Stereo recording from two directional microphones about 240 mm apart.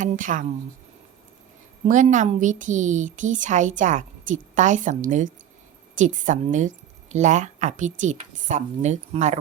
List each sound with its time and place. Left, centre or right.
0.0 s a woman's voice: right
1.8 s a woman's voice: right